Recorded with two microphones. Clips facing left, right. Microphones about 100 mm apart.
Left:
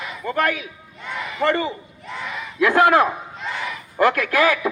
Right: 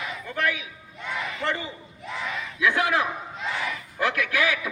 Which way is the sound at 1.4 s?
60° left (ahead or behind).